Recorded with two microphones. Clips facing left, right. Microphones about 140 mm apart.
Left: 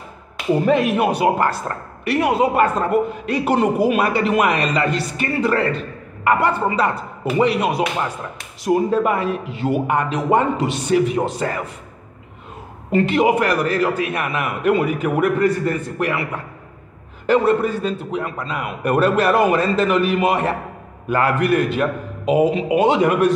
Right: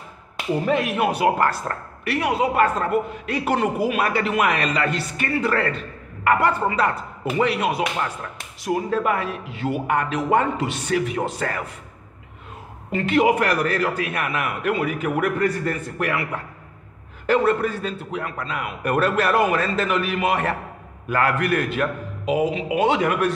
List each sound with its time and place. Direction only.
0.7 s a man's voice: 40° left (ahead or behind)
1.2 s a man's voice: 25° left (ahead or behind)
2.0 s a woman's voice: 45° left (ahead or behind)
2.6 s a man's voice: 30° left (ahead or behind)
7.3 s a man's voice: 35° left (ahead or behind)
12.9 s a man's voice: 30° left (ahead or behind)
17.3 s a man's voice: 30° left (ahead or behind)
22.2 s a man's voice: 45° left (ahead or behind)